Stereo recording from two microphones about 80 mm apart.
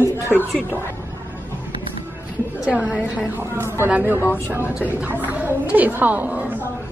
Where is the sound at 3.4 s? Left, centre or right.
Right.